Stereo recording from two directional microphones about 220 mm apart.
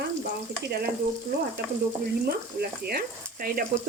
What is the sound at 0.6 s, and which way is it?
Speech, 45° right (ahead or behind).